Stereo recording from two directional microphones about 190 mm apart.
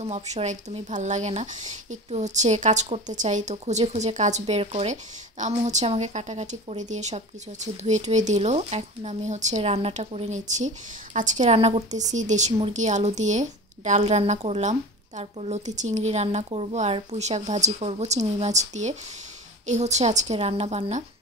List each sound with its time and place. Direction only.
0.0 s a woman's voice: 35° right (ahead or behind)